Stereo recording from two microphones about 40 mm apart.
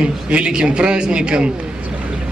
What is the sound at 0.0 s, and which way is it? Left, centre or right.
A man's voice, right.